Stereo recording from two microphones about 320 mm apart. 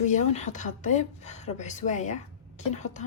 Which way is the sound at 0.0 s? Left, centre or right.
Left.